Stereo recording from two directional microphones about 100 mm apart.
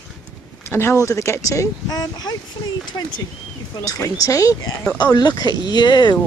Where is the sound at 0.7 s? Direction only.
25° left (ahead or behind).